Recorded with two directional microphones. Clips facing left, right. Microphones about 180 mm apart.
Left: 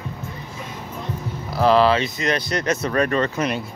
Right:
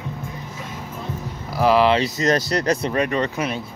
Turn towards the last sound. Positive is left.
turn(degrees=-15)  # may be behind; listen again after turning